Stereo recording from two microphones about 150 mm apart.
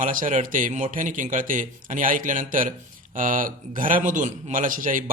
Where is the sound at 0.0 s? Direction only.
60° right (ahead or behind).